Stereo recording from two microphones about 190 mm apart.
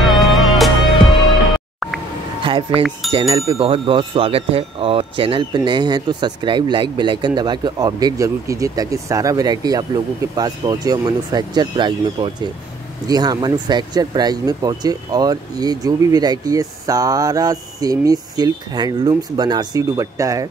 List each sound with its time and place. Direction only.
0.0 s music: centre (ahead or behind)
2.4 s speech: 25° right (ahead or behind)